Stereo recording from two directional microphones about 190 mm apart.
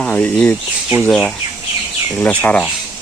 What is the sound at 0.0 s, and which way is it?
Speech, 5° left (ahead or behind).